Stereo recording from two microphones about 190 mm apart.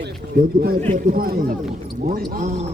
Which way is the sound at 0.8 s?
40° right (ahead or behind).